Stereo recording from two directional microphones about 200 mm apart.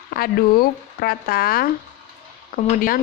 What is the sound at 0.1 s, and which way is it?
Speech, 50° left (ahead or behind).